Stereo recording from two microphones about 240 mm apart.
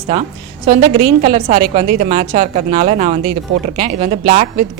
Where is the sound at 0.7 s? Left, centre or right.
Right.